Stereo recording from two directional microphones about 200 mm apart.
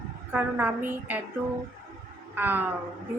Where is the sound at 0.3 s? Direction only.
10° right (ahead or behind).